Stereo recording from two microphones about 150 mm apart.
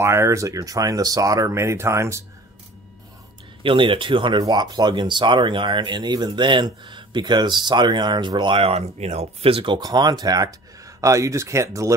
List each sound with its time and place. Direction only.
0.0 s speech: 20° right (ahead or behind)
3.6 s speech: 35° right (ahead or behind)